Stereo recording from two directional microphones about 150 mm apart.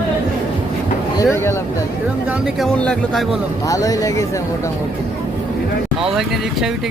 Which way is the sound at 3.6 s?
25° left (ahead or behind).